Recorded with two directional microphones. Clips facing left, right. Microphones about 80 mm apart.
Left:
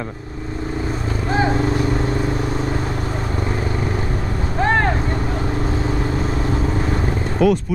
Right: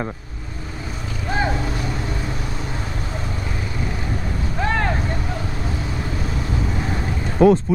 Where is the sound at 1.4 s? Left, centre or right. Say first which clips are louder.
Left 6 dB; left.